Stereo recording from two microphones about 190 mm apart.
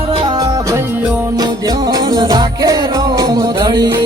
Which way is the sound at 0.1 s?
25° right (ahead or behind).